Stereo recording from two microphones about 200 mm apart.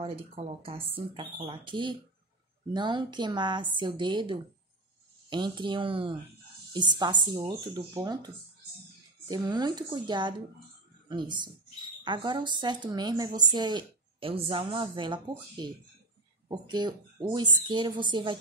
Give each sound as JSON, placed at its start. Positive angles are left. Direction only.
{"t": 0.0, "sound": "speech", "side_deg": -30}
{"t": 9.3, "sound": "speech", "side_deg": -20}